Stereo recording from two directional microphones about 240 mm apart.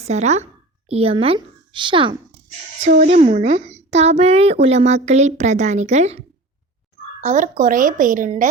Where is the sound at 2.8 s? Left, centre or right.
Right.